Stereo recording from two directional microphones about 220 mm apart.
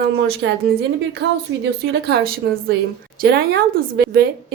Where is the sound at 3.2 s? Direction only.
45° right (ahead or behind).